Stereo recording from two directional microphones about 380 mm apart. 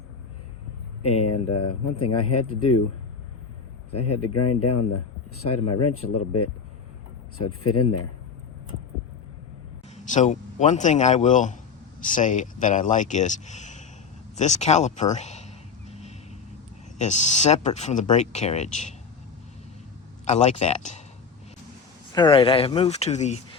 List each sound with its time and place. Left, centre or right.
1.4 s speech: centre
2.0 s speech: left
3.9 s speech: left
9.9 s a man's voice: centre
14.3 s a sound: centre
17.0 s speech: centre
20.2 s speech: centre
22.1 s speech: centre